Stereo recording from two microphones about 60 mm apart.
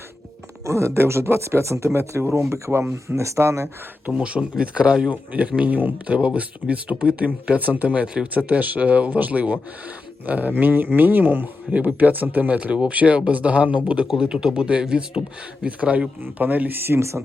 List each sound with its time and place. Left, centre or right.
0.6 s speech: right
4.1 s speech: centre; by 17.2 s right